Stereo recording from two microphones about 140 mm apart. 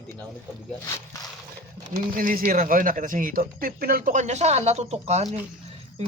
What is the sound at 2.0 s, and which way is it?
Speech, 80° right.